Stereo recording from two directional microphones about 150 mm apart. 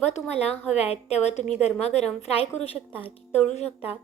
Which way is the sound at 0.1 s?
45° left (ahead or behind).